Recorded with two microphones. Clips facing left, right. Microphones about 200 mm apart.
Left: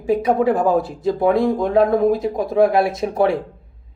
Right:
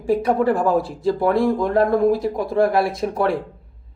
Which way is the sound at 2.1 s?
20° left (ahead or behind).